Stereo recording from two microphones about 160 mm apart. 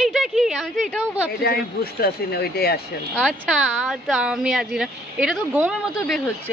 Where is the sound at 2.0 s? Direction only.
80° left.